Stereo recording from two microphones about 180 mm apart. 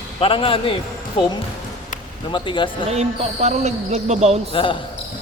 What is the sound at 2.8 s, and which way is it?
Speech, 35° right (ahead or behind).